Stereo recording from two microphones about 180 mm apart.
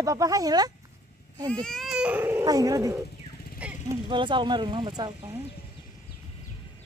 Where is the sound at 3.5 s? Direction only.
5° right (ahead or behind).